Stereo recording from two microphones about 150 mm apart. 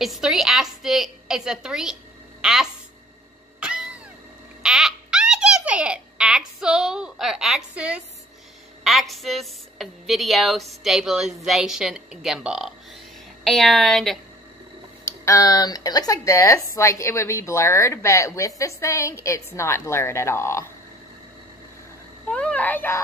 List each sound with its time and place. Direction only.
0.0 s a woman's voice: centre (ahead or behind)
3.5 s cat: 5° right (ahead or behind)
4.6 s baby laughter: 5° right (ahead or behind)
8.8 s a woman's voice: centre (ahead or behind)
15.0 s speech: 20° left (ahead or behind)
22.3 s a child's voice: 10° left (ahead or behind)